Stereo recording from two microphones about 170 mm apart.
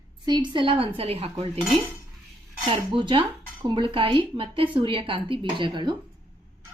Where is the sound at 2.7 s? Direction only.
30° right (ahead or behind).